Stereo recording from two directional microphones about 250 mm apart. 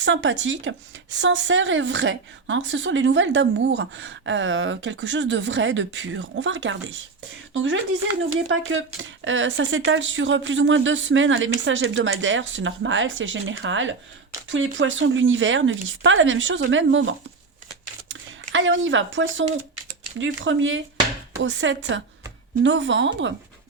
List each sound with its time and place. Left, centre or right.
0.0 s speech: right